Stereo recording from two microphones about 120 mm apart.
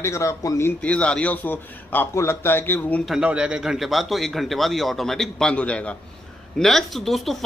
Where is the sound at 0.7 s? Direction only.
10° left (ahead or behind).